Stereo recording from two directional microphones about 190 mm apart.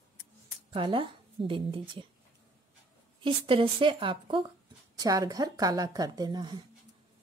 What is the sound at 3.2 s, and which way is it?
Speech, 25° right (ahead or behind).